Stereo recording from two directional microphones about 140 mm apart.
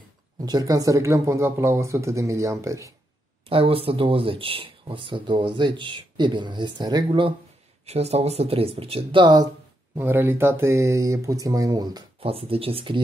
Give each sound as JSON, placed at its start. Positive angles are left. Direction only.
{"t": 0.5, "sound": "speech", "side_deg": -25}
{"t": 3.4, "sound": "speech", "side_deg": -40}
{"t": 7.8, "sound": "speech", "side_deg": -50}
{"t": 9.9, "sound": "speech", "side_deg": -15}
{"t": 12.2, "sound": "speech", "side_deg": -45}